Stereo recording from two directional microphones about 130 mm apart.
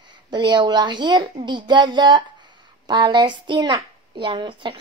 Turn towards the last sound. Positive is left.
turn(degrees=-40)  # may be behind; listen again after turning